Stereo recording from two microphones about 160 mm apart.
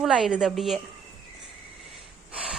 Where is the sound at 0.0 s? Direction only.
5° right (ahead or behind).